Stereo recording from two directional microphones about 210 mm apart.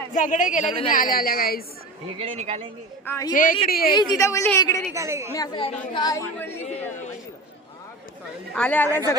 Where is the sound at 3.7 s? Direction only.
45° left (ahead or behind).